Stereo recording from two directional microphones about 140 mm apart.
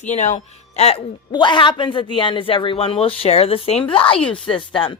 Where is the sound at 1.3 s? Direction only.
35° left (ahead or behind).